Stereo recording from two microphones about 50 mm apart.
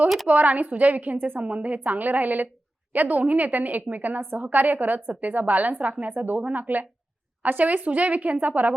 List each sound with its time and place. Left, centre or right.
0.3 s a woman's voice: right